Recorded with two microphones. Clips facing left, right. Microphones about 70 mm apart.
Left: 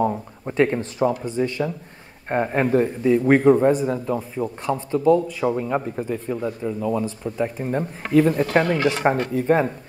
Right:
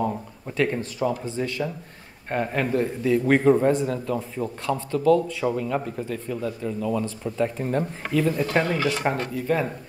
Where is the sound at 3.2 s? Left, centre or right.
Centre.